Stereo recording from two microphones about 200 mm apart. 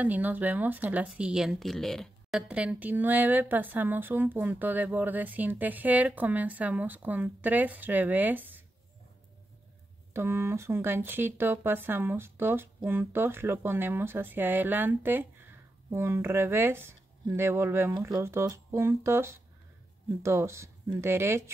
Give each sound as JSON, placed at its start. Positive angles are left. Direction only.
{"t": 0.0, "sound": "speech", "side_deg": -10}
{"t": 10.1, "sound": "speech", "side_deg": -10}